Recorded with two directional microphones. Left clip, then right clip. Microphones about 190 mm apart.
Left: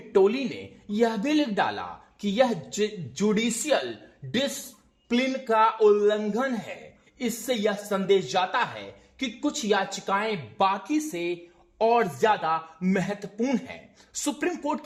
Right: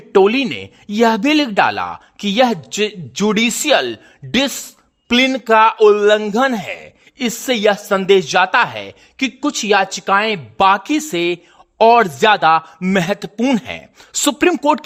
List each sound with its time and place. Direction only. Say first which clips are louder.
0.1 s a man's voice: right 10 dB; 40° right (ahead or behind)